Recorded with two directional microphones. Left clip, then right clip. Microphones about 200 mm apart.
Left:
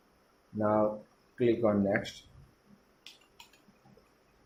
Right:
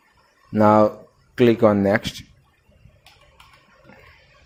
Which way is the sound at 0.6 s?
50° right (ahead or behind).